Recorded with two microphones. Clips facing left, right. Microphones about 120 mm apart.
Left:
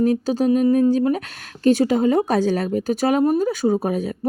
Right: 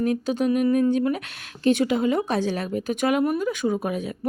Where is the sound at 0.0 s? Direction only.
35° left (ahead or behind).